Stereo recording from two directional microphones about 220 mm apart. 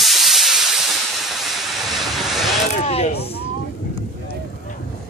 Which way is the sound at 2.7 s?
25° left (ahead or behind).